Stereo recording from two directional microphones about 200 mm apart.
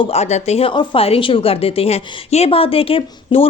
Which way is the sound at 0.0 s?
30° left (ahead or behind).